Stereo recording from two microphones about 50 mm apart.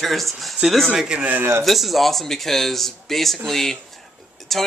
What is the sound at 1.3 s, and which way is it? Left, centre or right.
Speech, right.